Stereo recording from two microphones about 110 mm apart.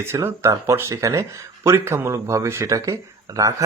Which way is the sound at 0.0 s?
25° right (ahead or behind).